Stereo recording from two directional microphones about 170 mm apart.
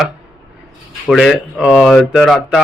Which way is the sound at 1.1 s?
Centre (ahead or behind).